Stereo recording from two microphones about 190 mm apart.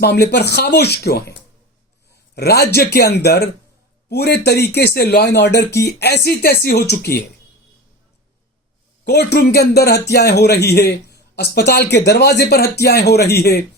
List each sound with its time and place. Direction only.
0.0 s speech: 60° left (ahead or behind)
9.0 s speech: 60° left (ahead or behind)